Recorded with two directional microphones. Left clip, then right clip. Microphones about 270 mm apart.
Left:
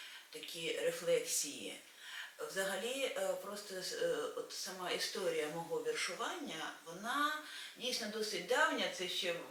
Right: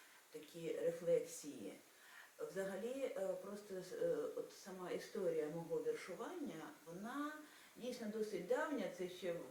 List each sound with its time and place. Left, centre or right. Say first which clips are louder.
0.6 s speech: left 4 dB; centre
5.9 s speech: left 7 dB; centre